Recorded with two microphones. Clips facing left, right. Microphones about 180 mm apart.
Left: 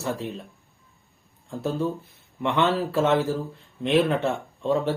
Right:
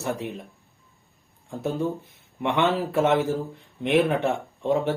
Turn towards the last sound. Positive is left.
turn(degrees=-15)  # may be behind; listen again after turning